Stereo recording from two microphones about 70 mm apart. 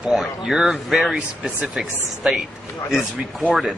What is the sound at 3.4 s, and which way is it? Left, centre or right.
Speech, centre.